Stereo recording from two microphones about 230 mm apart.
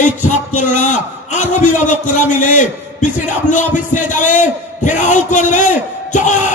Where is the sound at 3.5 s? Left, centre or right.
Left.